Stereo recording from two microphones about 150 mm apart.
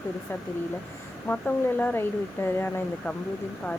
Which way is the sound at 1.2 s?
10° left (ahead or behind).